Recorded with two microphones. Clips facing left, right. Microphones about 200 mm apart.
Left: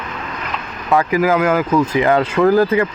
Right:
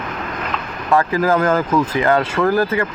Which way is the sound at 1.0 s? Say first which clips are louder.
Left 2 dB; 15° left (ahead or behind).